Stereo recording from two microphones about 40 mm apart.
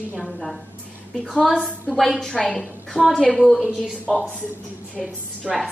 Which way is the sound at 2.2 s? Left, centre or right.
Left.